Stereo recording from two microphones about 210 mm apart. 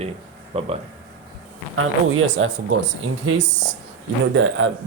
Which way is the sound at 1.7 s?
75° right (ahead or behind).